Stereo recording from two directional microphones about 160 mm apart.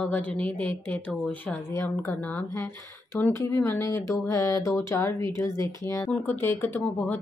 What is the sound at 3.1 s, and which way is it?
Speech, 15° left (ahead or behind).